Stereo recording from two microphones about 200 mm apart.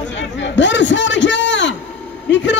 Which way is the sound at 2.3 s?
65° left (ahead or behind).